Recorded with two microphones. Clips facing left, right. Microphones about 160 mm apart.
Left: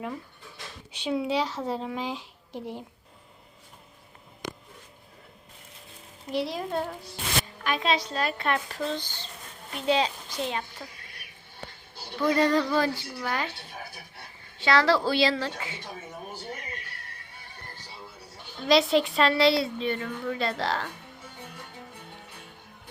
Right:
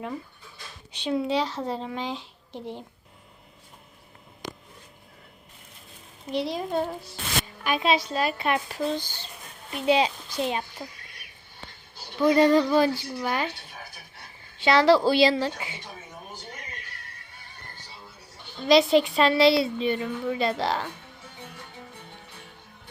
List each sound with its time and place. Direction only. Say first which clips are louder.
0.9 s speech: right 1 dB; 5° left (ahead or behind)
6.3 s a woman's voice: right 2 dB; centre (ahead or behind)
7.6 s a woman's voice: right 4 dB; 10° right (ahead or behind)
12.2 s a woman's voice: right 4 dB; 20° right (ahead or behind)
14.6 s a woman's voice: right 4 dB; 20° right (ahead or behind)
18.6 s a woman's voice: right 3 dB; centre (ahead or behind)